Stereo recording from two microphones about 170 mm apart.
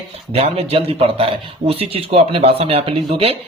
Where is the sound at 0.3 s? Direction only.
35° right (ahead or behind).